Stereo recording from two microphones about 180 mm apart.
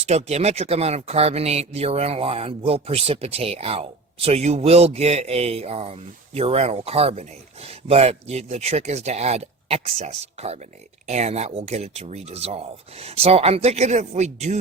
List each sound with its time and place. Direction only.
0.0 s speech: 35° right (ahead or behind)